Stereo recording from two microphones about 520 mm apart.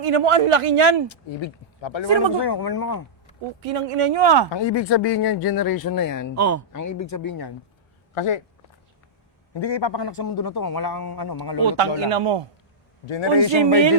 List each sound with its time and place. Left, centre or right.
0.0 s speech: right
1.1 s speech: left
3.6 s speech: right
4.5 s speech: left
8.1 s speech: left
9.6 s speech: left
11.6 s speech: right
13.1 s a man's voice: left